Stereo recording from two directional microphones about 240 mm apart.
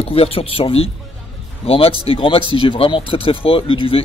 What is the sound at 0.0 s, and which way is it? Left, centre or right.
Speech, left.